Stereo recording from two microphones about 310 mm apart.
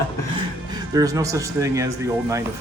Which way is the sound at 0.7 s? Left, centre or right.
Centre.